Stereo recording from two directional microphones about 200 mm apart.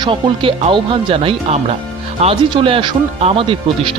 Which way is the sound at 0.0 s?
25° right (ahead or behind).